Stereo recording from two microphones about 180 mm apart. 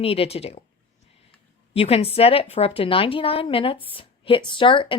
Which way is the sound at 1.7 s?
35° left (ahead or behind).